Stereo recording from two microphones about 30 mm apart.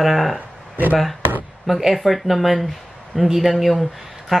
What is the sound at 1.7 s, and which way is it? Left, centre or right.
Speech, centre.